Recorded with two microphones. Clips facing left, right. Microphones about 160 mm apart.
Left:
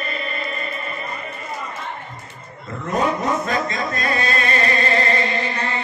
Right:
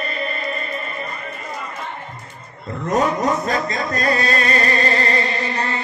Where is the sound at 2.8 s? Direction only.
40° right (ahead or behind).